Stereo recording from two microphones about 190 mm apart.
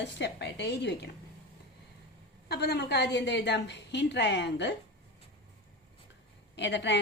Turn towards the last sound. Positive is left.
turn(degrees=65)  # may be behind; listen again after turning